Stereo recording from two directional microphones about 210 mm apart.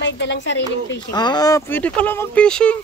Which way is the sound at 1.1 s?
20° left (ahead or behind).